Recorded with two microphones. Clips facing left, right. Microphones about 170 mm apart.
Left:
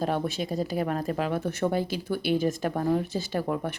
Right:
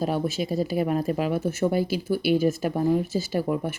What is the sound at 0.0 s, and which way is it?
Speech, 5° right (ahead or behind).